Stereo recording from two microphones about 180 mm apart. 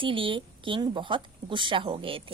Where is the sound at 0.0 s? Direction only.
30° right (ahead or behind).